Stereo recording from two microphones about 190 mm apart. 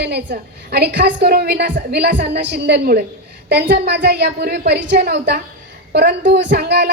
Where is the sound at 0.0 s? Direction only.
60° right (ahead or behind).